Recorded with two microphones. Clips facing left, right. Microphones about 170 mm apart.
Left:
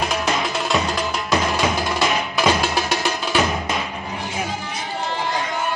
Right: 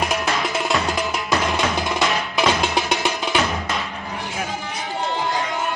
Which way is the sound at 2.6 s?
20° right (ahead or behind).